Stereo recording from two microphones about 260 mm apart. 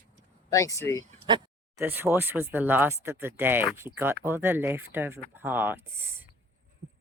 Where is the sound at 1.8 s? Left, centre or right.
Centre.